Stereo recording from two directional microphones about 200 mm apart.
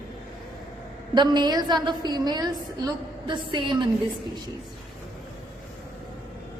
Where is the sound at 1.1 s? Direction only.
20° right (ahead or behind).